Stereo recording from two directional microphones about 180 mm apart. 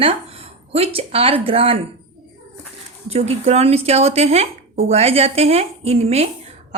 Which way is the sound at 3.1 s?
35° right (ahead or behind).